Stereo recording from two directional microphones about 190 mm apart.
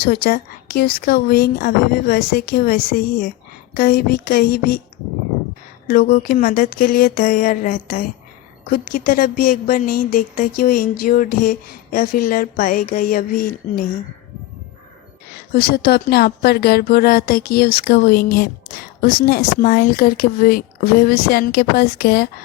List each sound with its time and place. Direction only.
0.0 s speech: 55° left (ahead or behind)
5.9 s speech: 50° left (ahead or behind)
15.5 s speech: 55° left (ahead or behind)